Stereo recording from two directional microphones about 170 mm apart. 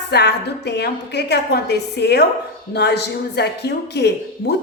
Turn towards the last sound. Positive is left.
turn(degrees=75)  # may be behind; listen again after turning